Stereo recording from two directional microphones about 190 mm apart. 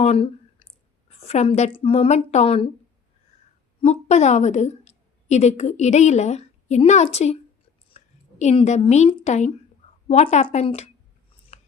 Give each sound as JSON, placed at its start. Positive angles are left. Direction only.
{"t": 0.0, "sound": "clicking", "side_deg": 30}
{"t": 1.1, "sound": "a woman's voice", "side_deg": 35}
{"t": 3.8, "sound": "a woman's voice", "side_deg": 35}
{"t": 11.5, "sound": "a sound", "side_deg": 35}